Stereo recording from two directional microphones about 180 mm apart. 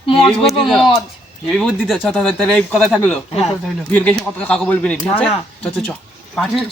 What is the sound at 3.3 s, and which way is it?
Speech, 35° left (ahead or behind).